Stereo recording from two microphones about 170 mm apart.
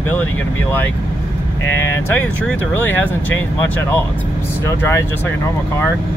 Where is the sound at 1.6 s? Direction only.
15° left (ahead or behind).